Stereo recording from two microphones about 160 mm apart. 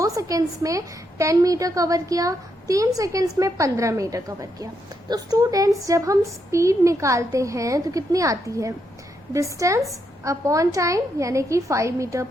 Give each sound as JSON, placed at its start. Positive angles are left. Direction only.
{"t": 0.0, "sound": "a woman's voice", "side_deg": -20}